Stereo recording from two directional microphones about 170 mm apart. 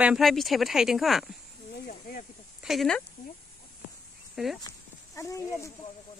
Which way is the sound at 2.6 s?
Centre (ahead or behind).